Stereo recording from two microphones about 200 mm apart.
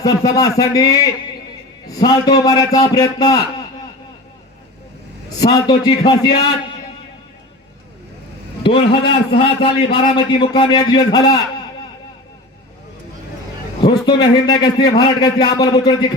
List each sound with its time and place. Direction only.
0.0 s a man's voice: 20° left (ahead or behind)
5.4 s a man's voice: 20° left (ahead or behind)
8.6 s a man's voice: 25° left (ahead or behind)
13.8 s a man's voice: 20° left (ahead or behind)